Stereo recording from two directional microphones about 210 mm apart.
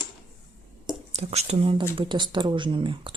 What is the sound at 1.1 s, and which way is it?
Speech, 30° right (ahead or behind).